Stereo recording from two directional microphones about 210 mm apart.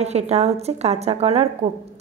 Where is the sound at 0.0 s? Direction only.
30° right (ahead or behind).